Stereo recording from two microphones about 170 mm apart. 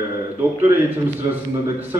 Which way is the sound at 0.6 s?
15° right (ahead or behind).